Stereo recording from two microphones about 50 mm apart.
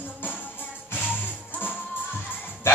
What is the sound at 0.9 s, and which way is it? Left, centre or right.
Music, left.